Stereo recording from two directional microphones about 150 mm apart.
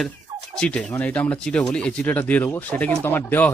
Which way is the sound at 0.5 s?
5° left (ahead or behind).